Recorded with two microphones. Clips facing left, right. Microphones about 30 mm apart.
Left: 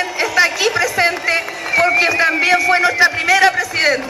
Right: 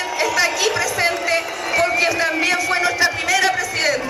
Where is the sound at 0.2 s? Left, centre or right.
Centre.